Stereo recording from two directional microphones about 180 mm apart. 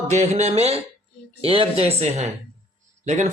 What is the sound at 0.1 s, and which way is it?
Speech, 40° right (ahead or behind).